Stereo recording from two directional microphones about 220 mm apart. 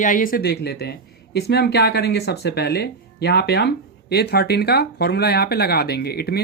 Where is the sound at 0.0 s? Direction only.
40° left (ahead or behind).